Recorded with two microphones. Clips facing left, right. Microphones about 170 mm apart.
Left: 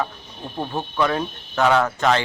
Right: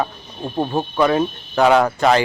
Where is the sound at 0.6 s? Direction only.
30° right (ahead or behind).